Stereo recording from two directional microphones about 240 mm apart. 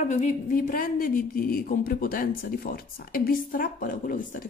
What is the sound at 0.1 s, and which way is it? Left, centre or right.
Speech, left.